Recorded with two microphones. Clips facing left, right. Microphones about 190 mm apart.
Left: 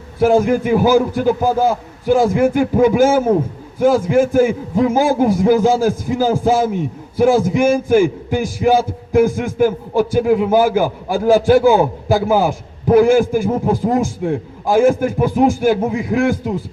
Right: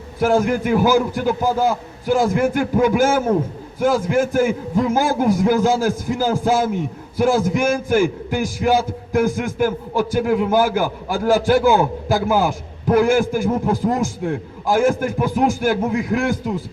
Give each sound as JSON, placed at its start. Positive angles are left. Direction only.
{"t": 0.2, "sound": "a man's voice", "side_deg": 10}